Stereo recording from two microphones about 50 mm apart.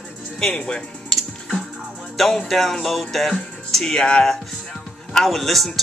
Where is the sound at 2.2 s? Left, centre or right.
Centre.